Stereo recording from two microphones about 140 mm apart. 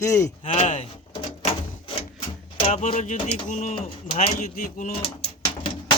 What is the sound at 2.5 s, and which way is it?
Speech, 50° left (ahead or behind).